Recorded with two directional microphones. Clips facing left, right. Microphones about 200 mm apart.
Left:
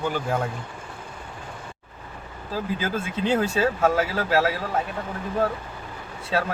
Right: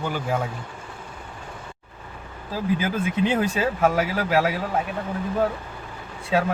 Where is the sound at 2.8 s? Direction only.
15° right (ahead or behind).